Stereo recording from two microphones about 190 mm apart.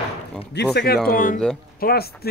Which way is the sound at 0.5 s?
60° left (ahead or behind).